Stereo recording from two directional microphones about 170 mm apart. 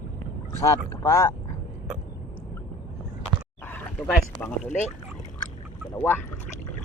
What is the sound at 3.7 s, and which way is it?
Speech, 10° left (ahead or behind).